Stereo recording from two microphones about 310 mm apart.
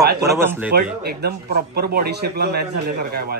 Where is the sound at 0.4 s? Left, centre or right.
Centre.